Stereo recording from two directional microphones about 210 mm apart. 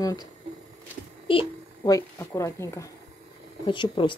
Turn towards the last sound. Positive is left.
turn(degrees=25)  # may be behind; listen again after turning